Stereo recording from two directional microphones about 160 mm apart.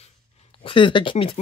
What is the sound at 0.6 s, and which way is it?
Speech, 30° left (ahead or behind).